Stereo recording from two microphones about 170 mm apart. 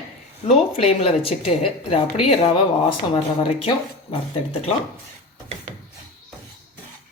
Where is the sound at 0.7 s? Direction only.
35° left (ahead or behind).